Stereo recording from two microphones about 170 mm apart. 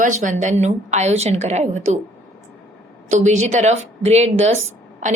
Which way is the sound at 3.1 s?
45° right (ahead or behind).